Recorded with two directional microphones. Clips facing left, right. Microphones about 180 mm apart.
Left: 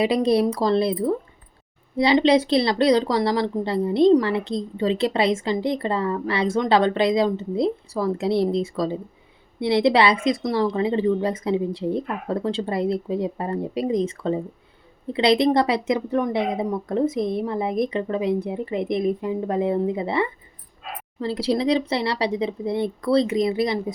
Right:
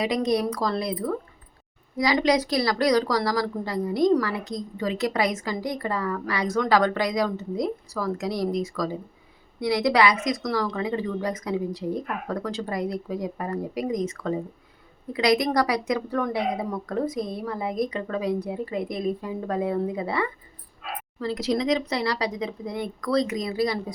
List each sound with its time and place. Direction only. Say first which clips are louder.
0.0 s speech: left 5 dB; 30° left (ahead or behind)